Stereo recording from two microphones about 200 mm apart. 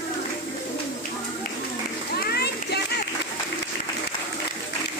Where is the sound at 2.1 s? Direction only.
50° left (ahead or behind).